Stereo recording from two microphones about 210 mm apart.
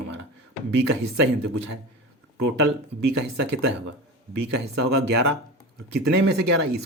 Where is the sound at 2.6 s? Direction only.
55° right (ahead or behind).